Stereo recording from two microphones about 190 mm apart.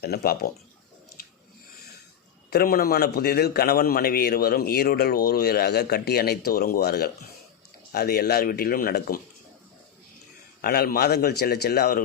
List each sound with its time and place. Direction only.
0.0 s a man's voice: 55° left (ahead or behind)
2.5 s a man's voice: 55° left (ahead or behind)
10.6 s a man's voice: 55° left (ahead or behind)